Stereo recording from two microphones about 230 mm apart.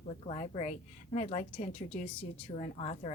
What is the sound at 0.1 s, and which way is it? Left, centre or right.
A woman's voice, left.